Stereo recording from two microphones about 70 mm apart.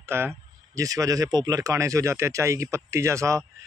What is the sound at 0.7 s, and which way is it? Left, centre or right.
A man's voice, right.